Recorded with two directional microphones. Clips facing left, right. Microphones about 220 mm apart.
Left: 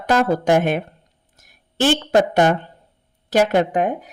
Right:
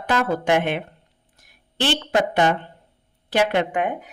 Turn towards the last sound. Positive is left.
turn(degrees=40)  # may be behind; listen again after turning